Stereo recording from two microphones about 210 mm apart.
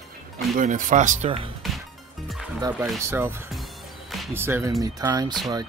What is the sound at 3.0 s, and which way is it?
Speech, 10° right (ahead or behind).